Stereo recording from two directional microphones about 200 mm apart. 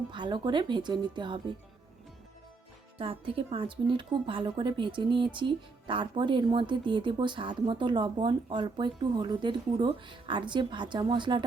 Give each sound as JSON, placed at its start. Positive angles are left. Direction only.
{"t": 0.1, "sound": "a woman's voice", "side_deg": -25}
{"t": 3.0, "sound": "a woman's voice", "side_deg": -25}